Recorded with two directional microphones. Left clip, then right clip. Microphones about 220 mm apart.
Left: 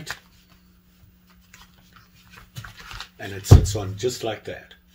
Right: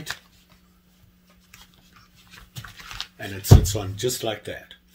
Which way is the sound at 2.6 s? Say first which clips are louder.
Left 2 dB; centre (ahead or behind).